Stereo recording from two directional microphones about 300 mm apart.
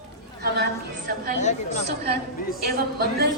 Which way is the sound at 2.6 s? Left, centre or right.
Right.